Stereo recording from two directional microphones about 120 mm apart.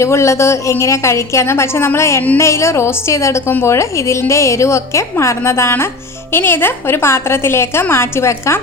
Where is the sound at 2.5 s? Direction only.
25° left (ahead or behind).